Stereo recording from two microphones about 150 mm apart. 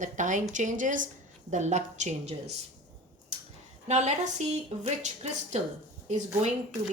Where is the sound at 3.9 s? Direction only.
50° right (ahead or behind).